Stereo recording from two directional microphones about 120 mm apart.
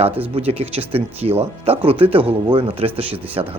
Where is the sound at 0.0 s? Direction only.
55° right (ahead or behind).